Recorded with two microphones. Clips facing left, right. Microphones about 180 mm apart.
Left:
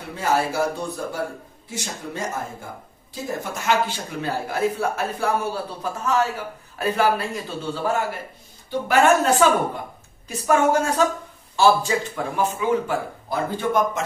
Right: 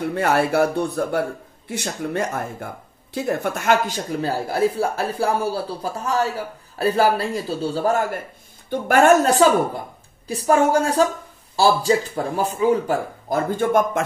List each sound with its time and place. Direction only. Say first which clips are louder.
0.0 s a man's voice: right 4 dB; 60° right (ahead or behind)